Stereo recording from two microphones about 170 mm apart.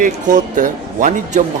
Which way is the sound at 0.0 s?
50° right (ahead or behind).